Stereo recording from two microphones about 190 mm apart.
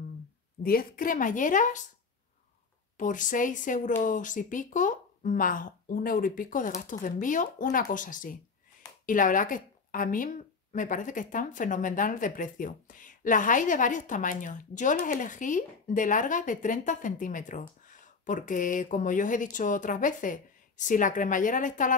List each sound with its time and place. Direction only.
0.7 s a woman's voice: 50° left (ahead or behind)
3.0 s a woman's voice: 45° left (ahead or behind)